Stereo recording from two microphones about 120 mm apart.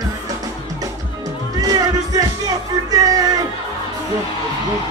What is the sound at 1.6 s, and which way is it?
Music, 30° right (ahead or behind).